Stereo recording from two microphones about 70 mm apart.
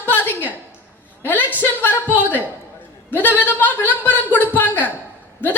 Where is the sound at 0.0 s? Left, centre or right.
Left.